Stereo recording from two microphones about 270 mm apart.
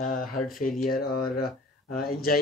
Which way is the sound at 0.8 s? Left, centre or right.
Left.